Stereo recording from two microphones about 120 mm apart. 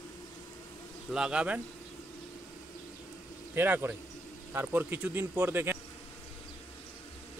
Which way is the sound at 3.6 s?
15° right (ahead or behind).